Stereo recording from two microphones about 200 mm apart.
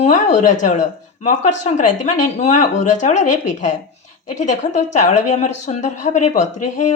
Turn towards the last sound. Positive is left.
turn(degrees=35)  # may be behind; listen again after turning